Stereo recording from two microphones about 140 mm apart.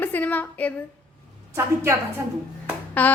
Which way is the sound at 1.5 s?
20° right (ahead or behind).